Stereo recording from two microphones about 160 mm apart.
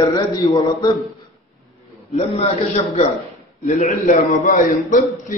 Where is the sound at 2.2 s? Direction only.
40° left (ahead or behind).